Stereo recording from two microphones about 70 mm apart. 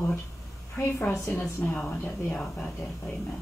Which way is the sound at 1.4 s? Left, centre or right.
Left.